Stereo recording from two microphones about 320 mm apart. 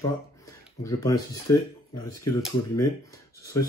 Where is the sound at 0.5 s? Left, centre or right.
Centre.